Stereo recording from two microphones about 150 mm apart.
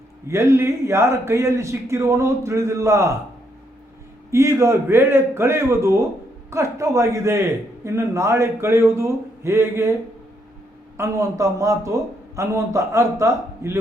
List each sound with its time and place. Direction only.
0.3 s a man's voice: 15° right (ahead or behind)
4.3 s a man's voice: 20° right (ahead or behind)
10.9 s a man's voice: 20° right (ahead or behind)